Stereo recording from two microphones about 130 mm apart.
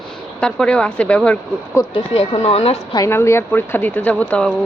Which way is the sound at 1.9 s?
50° left (ahead or behind).